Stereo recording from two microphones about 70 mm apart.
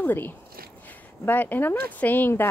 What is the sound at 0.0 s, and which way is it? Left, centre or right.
Speech, left.